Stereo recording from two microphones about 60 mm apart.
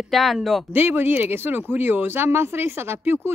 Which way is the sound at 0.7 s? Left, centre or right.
Right.